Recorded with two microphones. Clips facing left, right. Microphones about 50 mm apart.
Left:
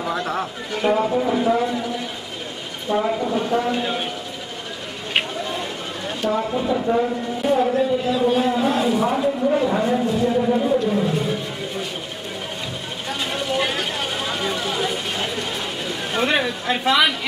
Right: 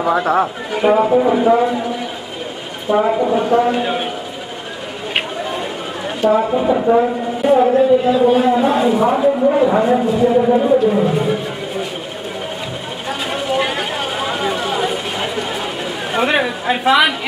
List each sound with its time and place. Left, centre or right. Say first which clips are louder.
0.0 s a man's voice: right 9 dB; centre
2.9 s a man's voice: right 6 dB; centre
5.1 s a sound: right 2 dB; centre
6.4 s a man's voice: right 6 dB; right
10.3 s speech: right 7 dB; centre
13.3 s a sound: right 4 dB; centre
16.1 s a man's voice: right 4 dB; centre